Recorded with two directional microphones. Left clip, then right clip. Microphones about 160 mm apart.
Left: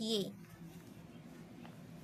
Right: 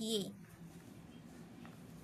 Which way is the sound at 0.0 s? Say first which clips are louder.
Left 2 dB; 15° left (ahead or behind).